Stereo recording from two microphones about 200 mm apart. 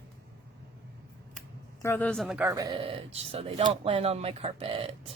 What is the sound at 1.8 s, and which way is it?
Speech, 10° left (ahead or behind).